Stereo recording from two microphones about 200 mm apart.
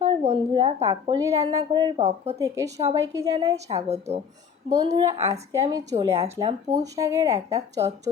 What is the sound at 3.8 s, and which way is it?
Speech, 30° right (ahead or behind).